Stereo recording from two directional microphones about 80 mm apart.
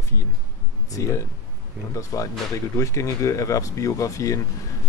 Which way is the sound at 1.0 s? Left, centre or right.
Left.